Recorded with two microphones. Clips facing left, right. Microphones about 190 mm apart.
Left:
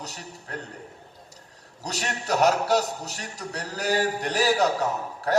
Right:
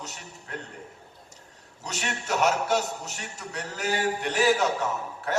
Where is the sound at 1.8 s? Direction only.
35° left (ahead or behind).